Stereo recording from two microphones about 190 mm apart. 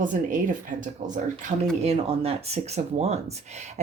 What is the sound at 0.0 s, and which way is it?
Speech, 45° right (ahead or behind).